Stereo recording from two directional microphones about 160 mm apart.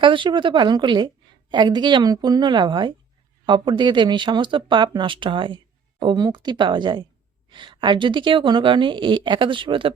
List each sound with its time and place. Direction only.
0.0 s a woman's voice: 30° right (ahead or behind)